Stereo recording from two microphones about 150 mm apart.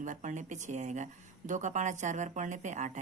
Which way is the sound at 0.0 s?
55° right (ahead or behind).